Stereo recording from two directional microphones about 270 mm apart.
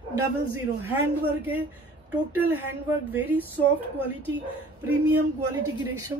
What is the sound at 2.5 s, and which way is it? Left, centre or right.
Speech, centre.